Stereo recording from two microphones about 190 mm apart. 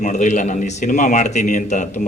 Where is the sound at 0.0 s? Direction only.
40° left (ahead or behind).